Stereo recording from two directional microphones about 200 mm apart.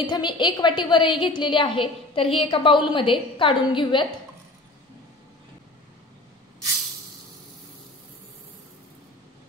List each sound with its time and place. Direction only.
0.0 s a woman's voice: 20° left (ahead or behind)